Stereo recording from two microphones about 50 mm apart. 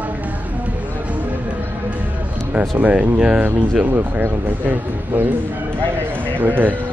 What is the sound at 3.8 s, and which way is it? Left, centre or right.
Speech, right.